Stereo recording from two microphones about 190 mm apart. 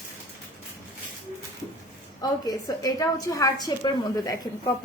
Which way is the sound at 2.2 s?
20° left (ahead or behind).